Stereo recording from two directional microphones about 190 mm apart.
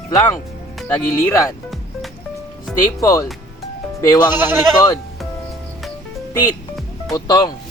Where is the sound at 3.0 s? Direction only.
15° left (ahead or behind).